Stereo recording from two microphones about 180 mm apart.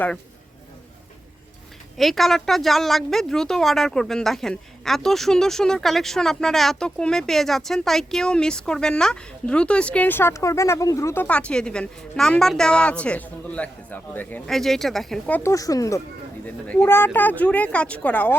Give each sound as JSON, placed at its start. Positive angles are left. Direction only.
{"t": 2.0, "sound": "a woman's voice", "side_deg": 0}
{"t": 15.4, "sound": "speech", "side_deg": 20}